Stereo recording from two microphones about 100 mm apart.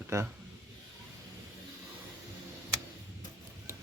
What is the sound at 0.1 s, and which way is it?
Speech, 30° right (ahead or behind).